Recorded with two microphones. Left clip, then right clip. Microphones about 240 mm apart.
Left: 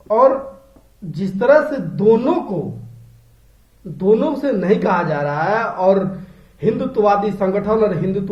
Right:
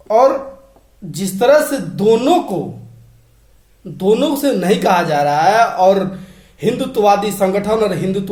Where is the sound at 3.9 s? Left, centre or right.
Centre.